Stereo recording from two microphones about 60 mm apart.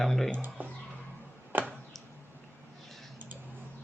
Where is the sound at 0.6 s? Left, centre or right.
Right.